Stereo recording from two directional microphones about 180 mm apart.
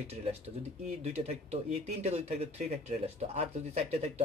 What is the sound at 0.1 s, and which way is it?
Speech, 35° right (ahead or behind).